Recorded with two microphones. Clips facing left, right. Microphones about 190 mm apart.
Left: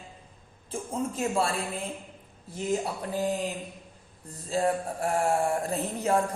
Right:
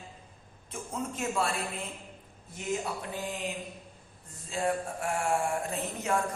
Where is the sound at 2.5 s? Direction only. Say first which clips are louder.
Left 4 dB; 35° left (ahead or behind).